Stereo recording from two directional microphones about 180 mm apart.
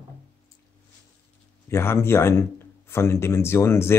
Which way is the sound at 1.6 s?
15° left (ahead or behind).